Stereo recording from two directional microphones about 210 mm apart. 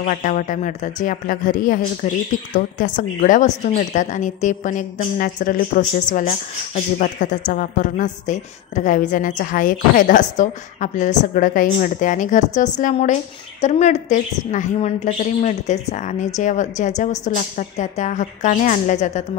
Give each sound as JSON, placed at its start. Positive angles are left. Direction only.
{"t": 0.0, "sound": "a woman's voice", "side_deg": 40}